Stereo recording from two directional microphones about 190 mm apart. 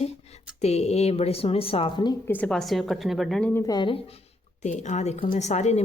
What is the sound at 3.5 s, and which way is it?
Speech, 20° left (ahead or behind).